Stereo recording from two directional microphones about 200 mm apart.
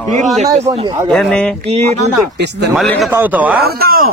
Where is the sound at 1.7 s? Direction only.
35° right (ahead or behind).